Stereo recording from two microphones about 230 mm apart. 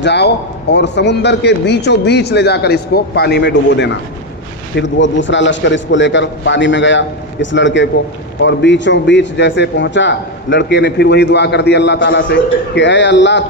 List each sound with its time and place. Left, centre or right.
0.0 s a man's voice: left